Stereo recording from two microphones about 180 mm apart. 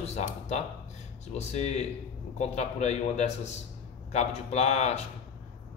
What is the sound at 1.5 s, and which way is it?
A man's voice, 35° left (ahead or behind).